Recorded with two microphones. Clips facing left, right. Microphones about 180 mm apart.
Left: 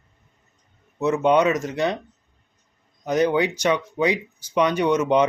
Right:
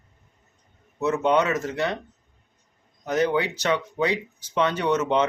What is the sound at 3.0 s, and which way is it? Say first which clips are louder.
Speech: left 3 dB; 15° left (ahead or behind).